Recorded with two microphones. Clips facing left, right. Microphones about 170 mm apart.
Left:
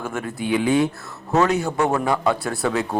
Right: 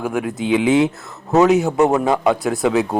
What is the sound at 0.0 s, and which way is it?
A man's voice, 10° right (ahead or behind).